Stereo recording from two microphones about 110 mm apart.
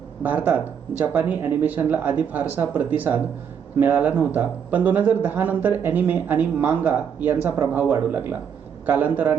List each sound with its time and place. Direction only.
0.2 s speech: 15° right (ahead or behind)